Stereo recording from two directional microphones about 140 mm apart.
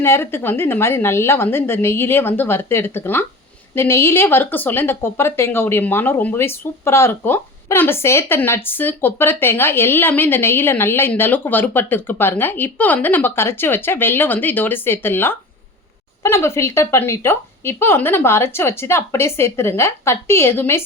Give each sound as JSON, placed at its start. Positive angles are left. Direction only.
{"t": 0.0, "sound": "speech", "side_deg": 15}